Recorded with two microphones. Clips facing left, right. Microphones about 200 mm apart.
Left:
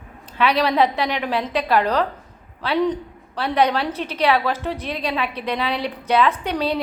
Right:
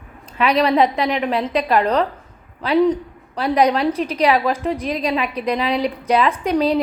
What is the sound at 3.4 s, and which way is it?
A woman's voice, 35° right (ahead or behind).